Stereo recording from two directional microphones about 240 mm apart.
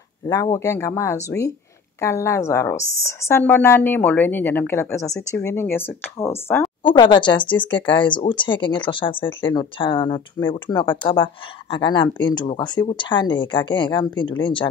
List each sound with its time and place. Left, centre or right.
0.3 s a woman's voice: centre
6.8 s speech: centre